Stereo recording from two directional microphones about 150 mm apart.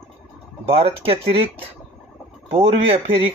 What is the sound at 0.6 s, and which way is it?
Speech, 40° right (ahead or behind).